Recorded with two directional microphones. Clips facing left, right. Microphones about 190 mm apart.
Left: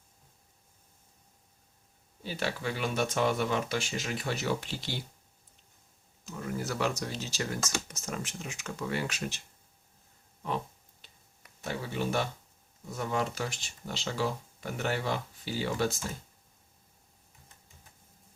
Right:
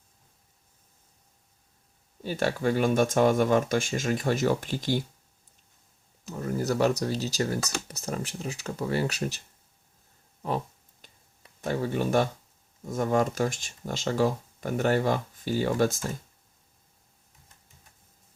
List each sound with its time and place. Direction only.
2.2 s speech: 45° right (ahead or behind)
6.4 s speech: 40° right (ahead or behind)
11.0 s a sound: 45° right (ahead or behind)
11.6 s speech: 45° right (ahead or behind)